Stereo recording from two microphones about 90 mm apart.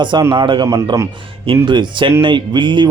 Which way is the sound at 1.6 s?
60° right (ahead or behind).